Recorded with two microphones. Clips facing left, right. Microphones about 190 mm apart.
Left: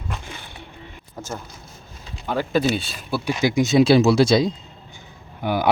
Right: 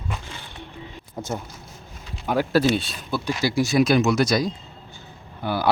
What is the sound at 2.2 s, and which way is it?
Speech, 10° right (ahead or behind).